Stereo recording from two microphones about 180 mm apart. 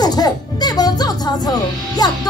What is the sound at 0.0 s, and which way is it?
Speech, 20° left (ahead or behind).